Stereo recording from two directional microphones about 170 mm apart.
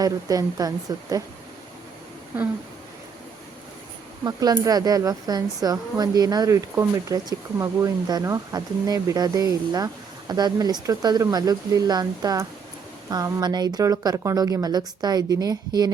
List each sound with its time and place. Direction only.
0.0 s a woman's voice: 20° right (ahead or behind)
4.2 s a woman's voice: 20° right (ahead or behind)